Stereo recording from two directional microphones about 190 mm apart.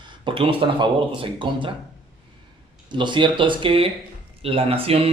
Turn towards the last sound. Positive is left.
turn(degrees=-30)  # may be behind; listen again after turning